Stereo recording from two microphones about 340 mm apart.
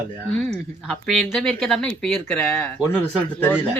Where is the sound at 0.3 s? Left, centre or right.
Centre.